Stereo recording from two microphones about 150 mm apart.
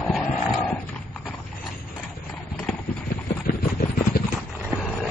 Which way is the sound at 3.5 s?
70° left (ahead or behind).